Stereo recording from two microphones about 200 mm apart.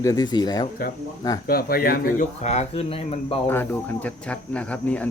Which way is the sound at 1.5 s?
45° left (ahead or behind).